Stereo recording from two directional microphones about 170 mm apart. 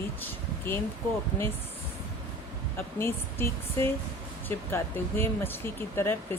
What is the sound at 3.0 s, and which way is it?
Speech, 15° left (ahead or behind).